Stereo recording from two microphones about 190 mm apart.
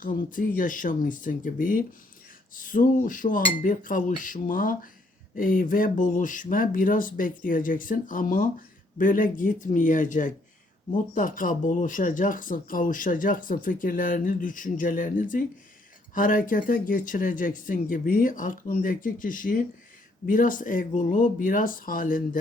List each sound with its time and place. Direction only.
0.0 s speech: 45° left (ahead or behind)